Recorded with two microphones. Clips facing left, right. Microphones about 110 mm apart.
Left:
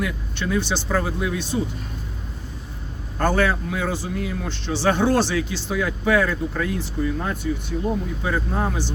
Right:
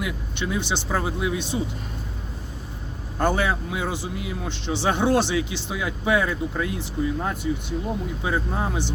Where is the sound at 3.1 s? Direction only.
15° right (ahead or behind).